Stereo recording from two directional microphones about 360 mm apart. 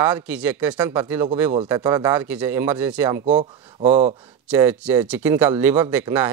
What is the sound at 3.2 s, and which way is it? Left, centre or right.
Speech, centre.